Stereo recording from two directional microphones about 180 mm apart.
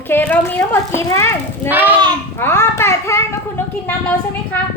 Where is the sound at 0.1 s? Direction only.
10° left (ahead or behind).